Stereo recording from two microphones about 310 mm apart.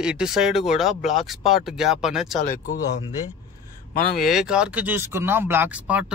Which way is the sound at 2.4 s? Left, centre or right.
Left.